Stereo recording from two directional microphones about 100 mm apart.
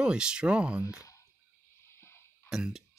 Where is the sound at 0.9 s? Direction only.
35° left (ahead or behind).